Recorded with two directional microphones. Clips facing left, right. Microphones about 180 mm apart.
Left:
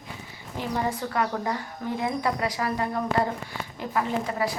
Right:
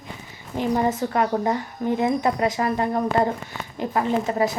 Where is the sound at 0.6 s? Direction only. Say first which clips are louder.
Right 6 dB; 25° right (ahead or behind).